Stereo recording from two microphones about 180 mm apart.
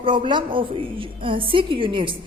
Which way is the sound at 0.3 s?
25° right (ahead or behind).